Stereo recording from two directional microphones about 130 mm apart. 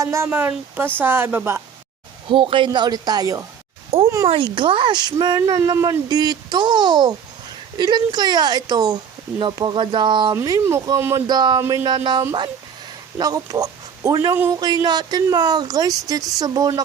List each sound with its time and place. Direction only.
0.0 s speech: 20° right (ahead or behind)
2.2 s speech: 45° right (ahead or behind)
4.0 s a sound: 25° right (ahead or behind)
4.3 s speech: 40° right (ahead or behind)
10.3 s speech: 25° right (ahead or behind)
11.3 s speech: 35° right (ahead or behind)
13.1 s speech: 30° right (ahead or behind)